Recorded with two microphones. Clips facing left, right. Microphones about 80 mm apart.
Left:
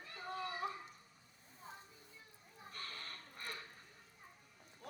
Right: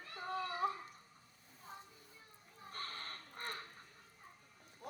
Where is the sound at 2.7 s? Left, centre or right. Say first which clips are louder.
Right 3 dB; right.